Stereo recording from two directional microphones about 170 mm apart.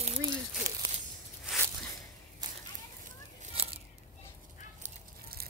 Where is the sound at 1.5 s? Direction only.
5° right (ahead or behind).